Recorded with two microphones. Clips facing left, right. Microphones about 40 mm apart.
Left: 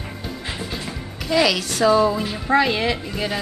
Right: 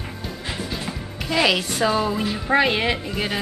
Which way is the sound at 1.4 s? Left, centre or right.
Right.